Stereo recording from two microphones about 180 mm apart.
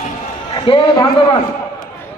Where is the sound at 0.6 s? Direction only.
30° left (ahead or behind).